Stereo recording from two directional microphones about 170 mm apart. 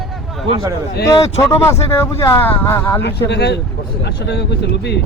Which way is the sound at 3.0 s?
85° left.